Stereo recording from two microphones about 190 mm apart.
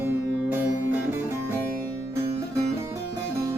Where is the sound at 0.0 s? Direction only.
10° right (ahead or behind).